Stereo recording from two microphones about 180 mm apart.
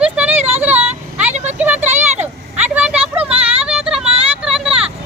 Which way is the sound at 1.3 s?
40° right (ahead or behind).